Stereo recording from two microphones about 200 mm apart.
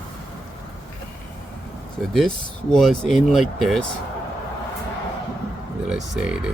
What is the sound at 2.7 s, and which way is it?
Speech, centre (ahead or behind).